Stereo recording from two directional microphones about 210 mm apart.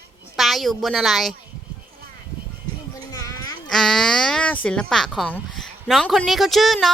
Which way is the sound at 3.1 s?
15° left (ahead or behind).